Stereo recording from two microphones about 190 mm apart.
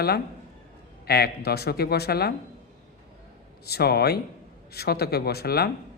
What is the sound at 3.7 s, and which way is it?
A man's voice, 55° left (ahead or behind).